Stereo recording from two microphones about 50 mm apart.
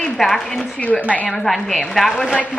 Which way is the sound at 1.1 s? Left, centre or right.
Left.